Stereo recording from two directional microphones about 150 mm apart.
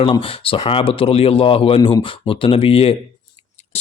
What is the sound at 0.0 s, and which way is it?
Speech, 35° left (ahead or behind).